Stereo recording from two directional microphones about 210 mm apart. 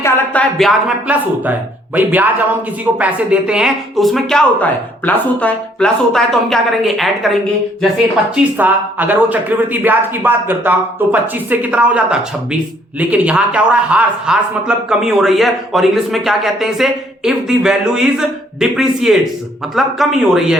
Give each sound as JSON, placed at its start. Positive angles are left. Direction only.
{"t": 0.0, "sound": "a man's voice", "side_deg": 5}
{"t": 8.5, "sound": "a man's voice", "side_deg": -10}